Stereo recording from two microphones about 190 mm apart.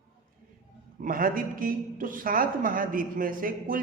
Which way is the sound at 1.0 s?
45° right (ahead or behind).